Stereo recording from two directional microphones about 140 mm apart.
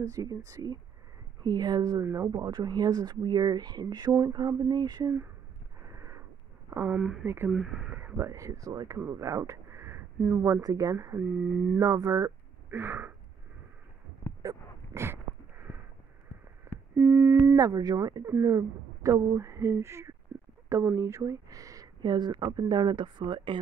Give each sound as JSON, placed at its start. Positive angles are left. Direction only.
{"t": 0.0, "sound": "speech", "side_deg": -25}
{"t": 5.9, "sound": "sniff", "side_deg": -20}
{"t": 6.7, "sound": "speech", "side_deg": -20}
{"t": 7.0, "sound": "speech", "side_deg": -5}
{"t": 7.2, "sound": "a sound", "side_deg": -15}
{"t": 7.5, "sound": "speech", "side_deg": 0}
{"t": 7.9, "sound": "speech", "side_deg": -20}
{"t": 12.7, "sound": "a sound", "side_deg": -15}
{"t": 14.4, "sound": "a sound", "side_deg": -20}
{"t": 16.9, "sound": "busy signal", "side_deg": -15}
{"t": 17.5, "sound": "speech", "side_deg": -25}